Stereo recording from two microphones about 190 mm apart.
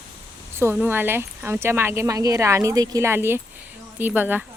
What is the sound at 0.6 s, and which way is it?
A woman's voice, 10° right (ahead or behind).